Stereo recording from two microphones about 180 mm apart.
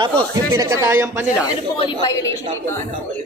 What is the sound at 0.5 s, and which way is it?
Speech, 15° right (ahead or behind).